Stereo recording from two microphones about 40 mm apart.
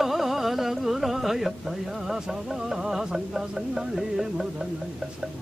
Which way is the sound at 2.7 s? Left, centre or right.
Centre.